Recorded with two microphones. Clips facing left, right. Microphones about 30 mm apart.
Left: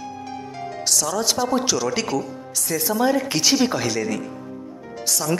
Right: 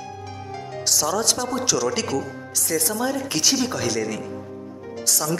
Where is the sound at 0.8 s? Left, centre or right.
Centre.